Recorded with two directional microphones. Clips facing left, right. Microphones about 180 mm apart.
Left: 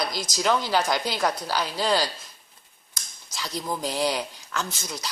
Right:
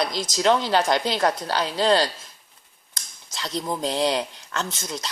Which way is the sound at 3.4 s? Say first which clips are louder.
Right 3 dB; 5° left (ahead or behind).